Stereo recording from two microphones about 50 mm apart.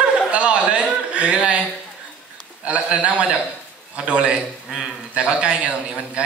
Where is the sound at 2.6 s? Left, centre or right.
Right.